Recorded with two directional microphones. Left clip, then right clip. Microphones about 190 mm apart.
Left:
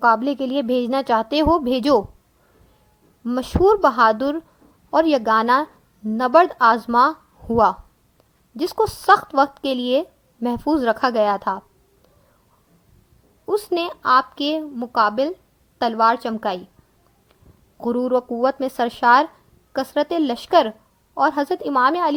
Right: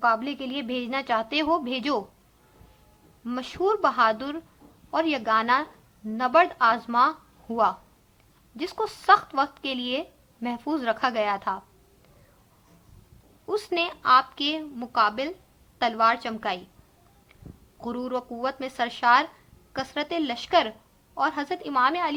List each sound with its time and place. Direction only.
0.0 s speech: 50° left (ahead or behind)
3.2 s speech: 50° left (ahead or behind)
13.5 s speech: 50° left (ahead or behind)
17.8 s speech: 50° left (ahead or behind)